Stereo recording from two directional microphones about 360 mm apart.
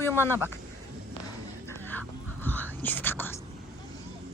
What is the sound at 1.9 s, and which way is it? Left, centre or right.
Whispering, centre.